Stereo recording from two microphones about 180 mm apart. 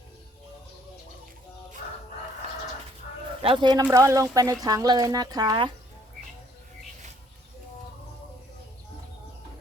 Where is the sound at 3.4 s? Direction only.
30° right (ahead or behind).